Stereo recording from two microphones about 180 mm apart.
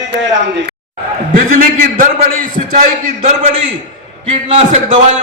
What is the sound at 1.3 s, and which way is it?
A man's voice, 50° right (ahead or behind).